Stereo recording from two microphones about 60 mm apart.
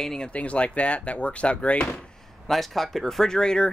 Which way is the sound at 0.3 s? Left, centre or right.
Left.